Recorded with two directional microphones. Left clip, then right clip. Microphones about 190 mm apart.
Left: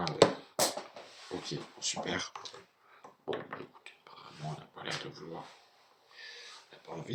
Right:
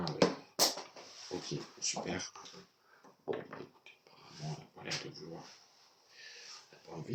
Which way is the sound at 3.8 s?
Centre (ahead or behind).